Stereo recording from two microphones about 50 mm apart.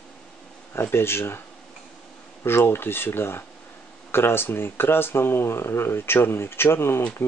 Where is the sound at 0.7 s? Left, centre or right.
Left.